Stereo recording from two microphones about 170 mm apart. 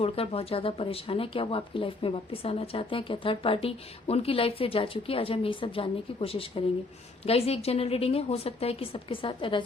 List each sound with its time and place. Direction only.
0.0 s speech: 35° left (ahead or behind)